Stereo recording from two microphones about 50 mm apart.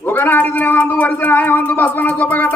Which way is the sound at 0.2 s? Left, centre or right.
Left.